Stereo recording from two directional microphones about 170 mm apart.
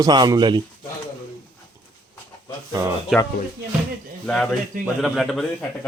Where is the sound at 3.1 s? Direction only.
Centre (ahead or behind).